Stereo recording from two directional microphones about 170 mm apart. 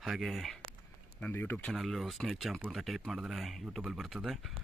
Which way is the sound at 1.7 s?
Centre (ahead or behind).